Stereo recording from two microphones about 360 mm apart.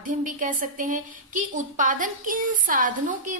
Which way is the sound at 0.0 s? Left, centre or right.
Right.